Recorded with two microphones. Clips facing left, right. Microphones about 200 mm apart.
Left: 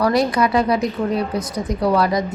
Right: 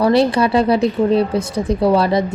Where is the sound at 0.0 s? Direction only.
30° right (ahead or behind).